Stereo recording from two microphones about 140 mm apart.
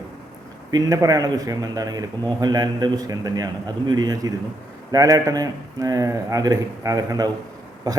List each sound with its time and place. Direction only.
0.7 s speech: 25° right (ahead or behind)